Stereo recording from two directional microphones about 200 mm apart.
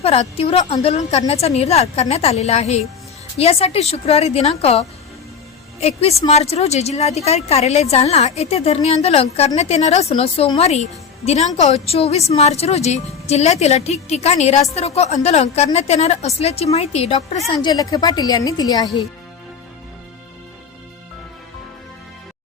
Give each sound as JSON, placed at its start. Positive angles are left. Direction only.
{"t": 0.0, "sound": "speech", "side_deg": 30}
{"t": 17.5, "sound": "a woman's voice", "side_deg": 20}